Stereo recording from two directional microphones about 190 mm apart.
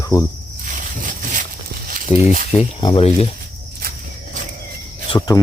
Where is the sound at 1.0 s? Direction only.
40° right (ahead or behind).